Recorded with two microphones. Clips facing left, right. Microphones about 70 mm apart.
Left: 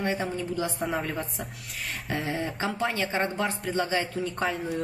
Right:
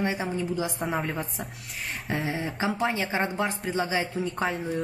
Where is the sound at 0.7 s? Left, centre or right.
Centre.